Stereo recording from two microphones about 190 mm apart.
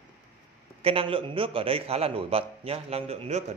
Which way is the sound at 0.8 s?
30° right (ahead or behind).